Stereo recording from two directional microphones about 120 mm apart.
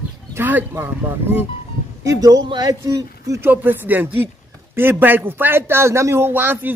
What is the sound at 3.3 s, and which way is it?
A man's voice, 15° right (ahead or behind).